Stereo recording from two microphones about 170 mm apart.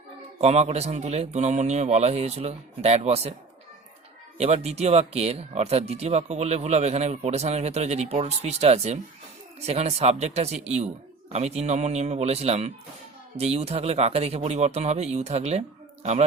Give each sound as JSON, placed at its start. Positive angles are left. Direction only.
{"t": 0.3, "sound": "speech", "side_deg": -40}
{"t": 4.4, "sound": "speech", "side_deg": -40}